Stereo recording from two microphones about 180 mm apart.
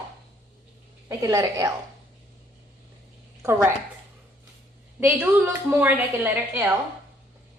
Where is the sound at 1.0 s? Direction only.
20° right (ahead or behind).